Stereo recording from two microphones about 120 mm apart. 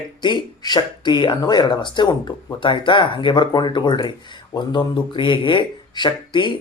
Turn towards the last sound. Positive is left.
turn(degrees=40)  # may be behind; listen again after turning